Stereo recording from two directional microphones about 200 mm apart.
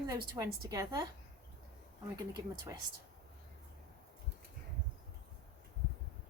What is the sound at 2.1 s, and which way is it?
Speech, 20° right (ahead or behind).